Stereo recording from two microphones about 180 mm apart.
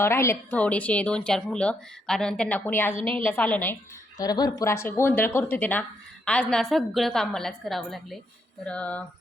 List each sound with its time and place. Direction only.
0.0 s speech: 15° left (ahead or behind)
2.9 s a woman's voice: 30° right (ahead or behind)
3.2 s speech: 10° left (ahead or behind)
4.2 s a woman's voice: 20° left (ahead or behind)